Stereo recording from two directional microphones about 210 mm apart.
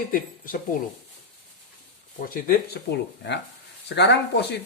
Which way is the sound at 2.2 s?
45° left (ahead or behind).